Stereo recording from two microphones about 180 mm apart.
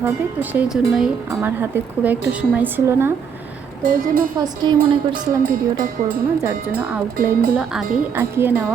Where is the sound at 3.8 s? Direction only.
50° right (ahead or behind).